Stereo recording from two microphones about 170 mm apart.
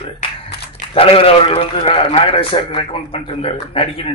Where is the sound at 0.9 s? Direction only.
35° left (ahead or behind).